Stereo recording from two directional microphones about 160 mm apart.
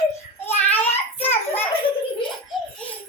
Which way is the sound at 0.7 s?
10° left (ahead or behind).